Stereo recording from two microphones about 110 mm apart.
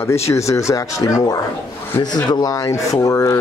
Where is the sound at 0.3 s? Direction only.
25° left (ahead or behind).